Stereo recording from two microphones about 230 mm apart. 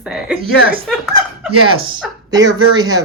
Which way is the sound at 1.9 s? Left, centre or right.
Centre.